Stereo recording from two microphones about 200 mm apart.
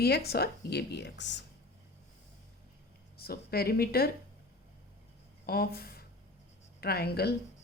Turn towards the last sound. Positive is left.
turn(degrees=50)  # may be behind; listen again after turning